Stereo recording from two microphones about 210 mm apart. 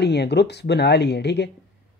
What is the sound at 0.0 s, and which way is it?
Speech, 55° left (ahead or behind).